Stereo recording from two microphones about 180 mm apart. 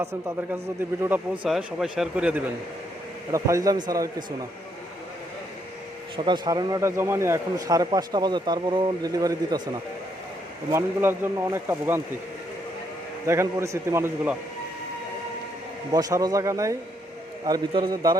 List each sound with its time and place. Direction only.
0.0 s speech: 15° right (ahead or behind)
1.5 s a man's voice: centre (ahead or behind)
3.3 s a man's voice: 20° right (ahead or behind)
6.2 s a man's voice: 25° right (ahead or behind)
13.2 s speech: 15° right (ahead or behind)
15.9 s a man's voice: 20° right (ahead or behind)